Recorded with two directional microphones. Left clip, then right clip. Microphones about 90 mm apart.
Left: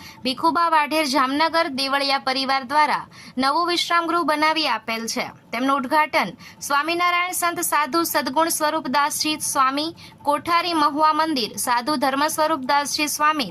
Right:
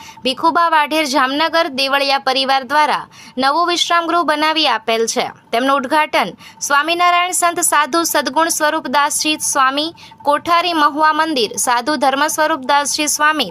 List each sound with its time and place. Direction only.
0.3 s speech: 30° right (ahead or behind)